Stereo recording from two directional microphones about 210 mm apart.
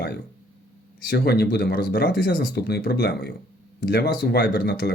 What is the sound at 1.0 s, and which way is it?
Speech, 50° left (ahead or behind).